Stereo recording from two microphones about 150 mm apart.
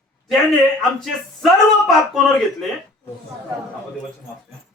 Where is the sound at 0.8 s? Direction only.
Centre (ahead or behind).